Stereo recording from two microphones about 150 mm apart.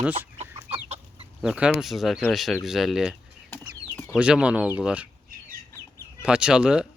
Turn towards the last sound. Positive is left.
turn(degrees=-5)  # may be behind; listen again after turning